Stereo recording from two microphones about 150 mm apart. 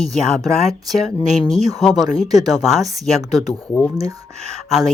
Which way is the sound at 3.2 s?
25° right (ahead or behind).